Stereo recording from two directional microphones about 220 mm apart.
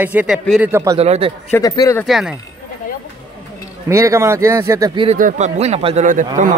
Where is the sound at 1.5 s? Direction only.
15° left (ahead or behind).